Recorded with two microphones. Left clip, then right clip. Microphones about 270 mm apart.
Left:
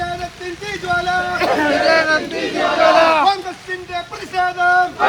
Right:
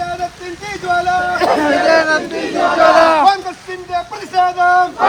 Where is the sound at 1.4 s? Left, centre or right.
Right.